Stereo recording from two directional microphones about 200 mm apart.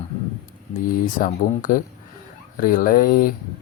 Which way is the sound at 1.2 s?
40° left (ahead or behind).